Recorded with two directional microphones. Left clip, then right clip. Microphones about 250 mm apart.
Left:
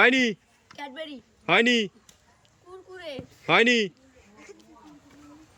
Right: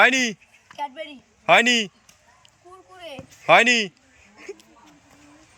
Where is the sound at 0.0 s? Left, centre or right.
Centre.